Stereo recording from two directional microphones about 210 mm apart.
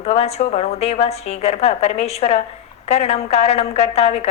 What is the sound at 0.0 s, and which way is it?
A woman's voice, 30° left (ahead or behind).